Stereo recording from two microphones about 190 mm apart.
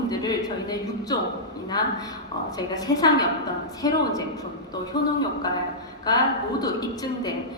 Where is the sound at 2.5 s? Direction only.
20° left (ahead or behind).